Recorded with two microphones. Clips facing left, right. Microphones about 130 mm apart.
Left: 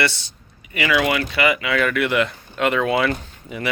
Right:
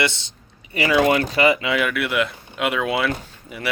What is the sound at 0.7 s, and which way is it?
Speech, 35° right (ahead or behind).